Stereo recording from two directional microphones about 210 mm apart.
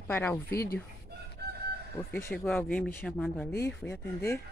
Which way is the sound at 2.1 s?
10° left (ahead or behind).